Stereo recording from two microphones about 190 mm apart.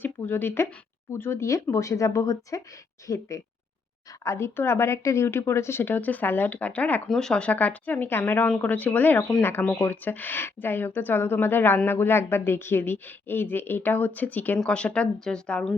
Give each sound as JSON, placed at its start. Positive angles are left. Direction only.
{"t": 0.0, "sound": "a woman's voice", "side_deg": 10}